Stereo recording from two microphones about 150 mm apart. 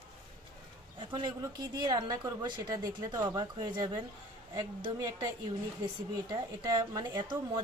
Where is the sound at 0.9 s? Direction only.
35° right (ahead or behind).